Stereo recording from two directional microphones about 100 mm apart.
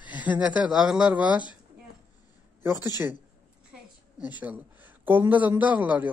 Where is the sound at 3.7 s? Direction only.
15° right (ahead or behind).